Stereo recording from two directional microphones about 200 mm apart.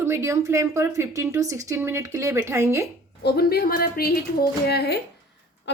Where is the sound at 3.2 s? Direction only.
50° left (ahead or behind).